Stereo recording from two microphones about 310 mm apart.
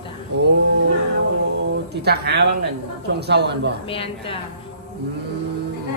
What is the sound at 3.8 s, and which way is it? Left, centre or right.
Speech, centre.